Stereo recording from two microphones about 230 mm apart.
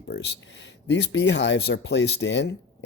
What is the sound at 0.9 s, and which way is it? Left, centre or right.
Speech, left.